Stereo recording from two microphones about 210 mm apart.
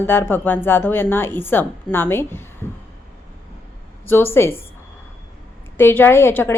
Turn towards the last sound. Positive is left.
turn(degrees=10)  # may be behind; listen again after turning